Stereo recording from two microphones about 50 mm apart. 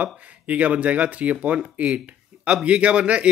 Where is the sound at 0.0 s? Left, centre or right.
Right.